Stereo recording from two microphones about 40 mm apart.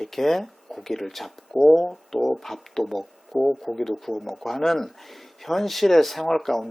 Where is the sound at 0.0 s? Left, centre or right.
Centre.